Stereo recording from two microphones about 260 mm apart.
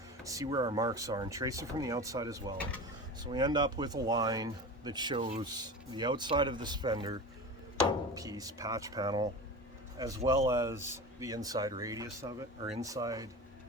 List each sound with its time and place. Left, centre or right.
0.3 s speech: centre